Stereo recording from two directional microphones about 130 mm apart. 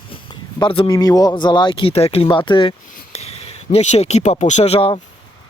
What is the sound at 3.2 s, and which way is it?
Speech, 50° left (ahead or behind).